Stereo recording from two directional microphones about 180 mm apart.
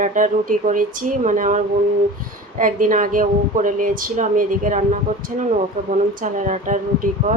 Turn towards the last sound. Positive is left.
turn(degrees=-45)  # may be behind; listen again after turning